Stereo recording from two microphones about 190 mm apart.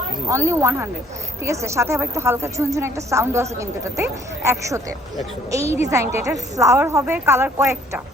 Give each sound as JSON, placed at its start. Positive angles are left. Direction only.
{"t": 0.3, "sound": "a woman's voice", "side_deg": -15}